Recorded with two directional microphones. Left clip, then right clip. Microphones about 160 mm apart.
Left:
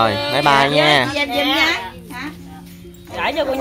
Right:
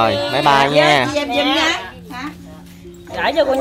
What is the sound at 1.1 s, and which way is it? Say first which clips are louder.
Speech: right 1 dB; 35° right (ahead or behind).